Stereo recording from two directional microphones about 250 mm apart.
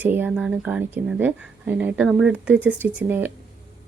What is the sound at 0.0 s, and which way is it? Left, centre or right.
Speech, centre.